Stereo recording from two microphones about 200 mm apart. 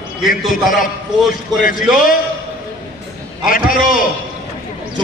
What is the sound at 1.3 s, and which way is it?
Speech, 45° left (ahead or behind).